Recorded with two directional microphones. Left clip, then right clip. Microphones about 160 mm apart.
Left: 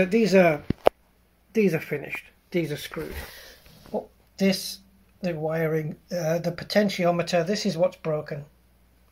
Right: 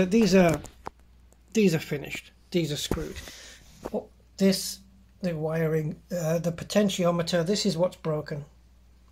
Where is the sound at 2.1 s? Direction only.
20° right (ahead or behind).